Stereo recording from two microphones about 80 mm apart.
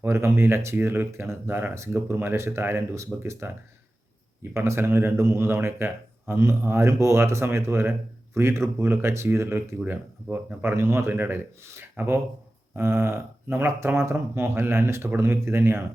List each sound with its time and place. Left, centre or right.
0.0 s a man's voice: right